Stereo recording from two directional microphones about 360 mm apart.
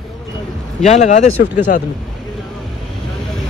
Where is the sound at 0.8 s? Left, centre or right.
Centre.